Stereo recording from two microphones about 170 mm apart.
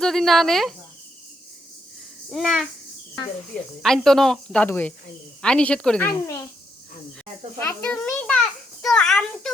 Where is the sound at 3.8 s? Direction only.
Centre (ahead or behind).